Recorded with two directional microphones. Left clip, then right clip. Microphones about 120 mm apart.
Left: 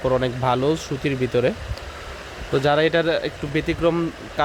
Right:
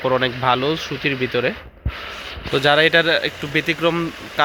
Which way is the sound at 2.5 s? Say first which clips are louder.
Right 4 dB; centre (ahead or behind).